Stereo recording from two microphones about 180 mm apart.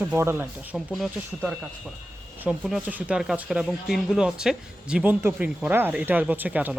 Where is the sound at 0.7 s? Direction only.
Centre (ahead or behind).